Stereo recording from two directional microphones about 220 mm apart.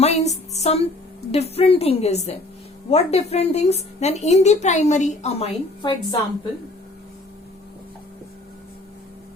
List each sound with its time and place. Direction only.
0.0 s music: 30° left (ahead or behind)
1.3 s a woman's voice: 30° left (ahead or behind)